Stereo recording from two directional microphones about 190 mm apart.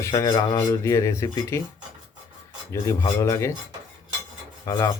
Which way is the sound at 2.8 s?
15° left (ahead or behind).